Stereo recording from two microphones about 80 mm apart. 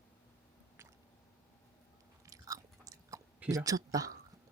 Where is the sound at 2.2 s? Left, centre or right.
Right.